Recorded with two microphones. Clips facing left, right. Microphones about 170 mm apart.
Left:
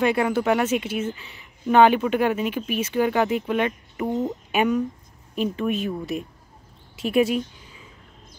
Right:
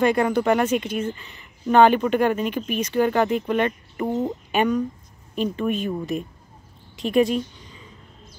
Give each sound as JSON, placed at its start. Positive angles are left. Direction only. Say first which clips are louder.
{"t": 0.0, "sound": "speech", "louder": "right 2 dB", "side_deg": 5}